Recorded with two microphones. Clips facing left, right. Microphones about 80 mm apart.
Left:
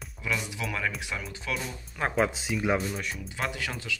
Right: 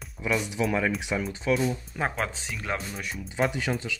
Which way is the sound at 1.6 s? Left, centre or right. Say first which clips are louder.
Right 5 dB; centre.